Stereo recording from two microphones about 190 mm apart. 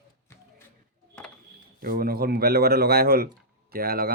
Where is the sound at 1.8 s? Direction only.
50° right (ahead or behind).